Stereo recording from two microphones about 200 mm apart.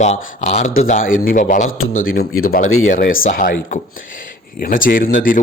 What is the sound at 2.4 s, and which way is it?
A man's voice, 50° left (ahead or behind).